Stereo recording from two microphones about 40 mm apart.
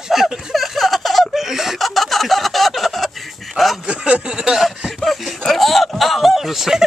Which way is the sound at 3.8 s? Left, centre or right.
Right.